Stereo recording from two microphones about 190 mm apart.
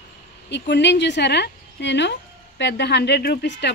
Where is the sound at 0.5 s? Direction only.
65° left (ahead or behind).